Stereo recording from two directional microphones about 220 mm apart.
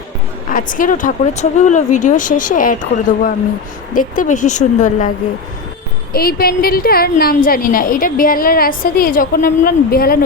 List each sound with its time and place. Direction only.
0.5 s a woman's voice: 35° left (ahead or behind)
6.1 s a woman's voice: 45° left (ahead or behind)